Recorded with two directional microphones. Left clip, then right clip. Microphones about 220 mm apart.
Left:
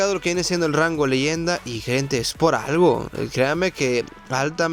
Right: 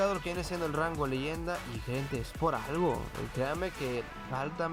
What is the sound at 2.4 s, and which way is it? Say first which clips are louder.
Speech: left 12 dB; 35° left (ahead or behind).